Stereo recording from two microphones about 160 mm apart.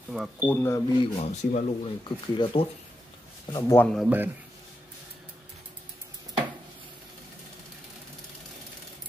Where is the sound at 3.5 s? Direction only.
20° left (ahead or behind).